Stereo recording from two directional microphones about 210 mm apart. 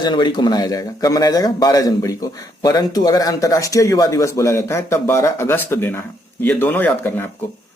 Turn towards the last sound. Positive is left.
turn(degrees=10)  # may be behind; listen again after turning